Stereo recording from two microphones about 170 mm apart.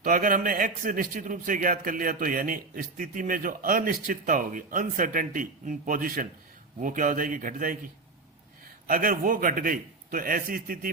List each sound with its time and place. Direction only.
0.0 s a man's voice: 55° right (ahead or behind)
8.9 s a man's voice: 55° right (ahead or behind)